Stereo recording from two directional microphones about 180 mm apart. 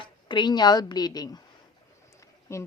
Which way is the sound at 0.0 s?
25° left (ahead or behind).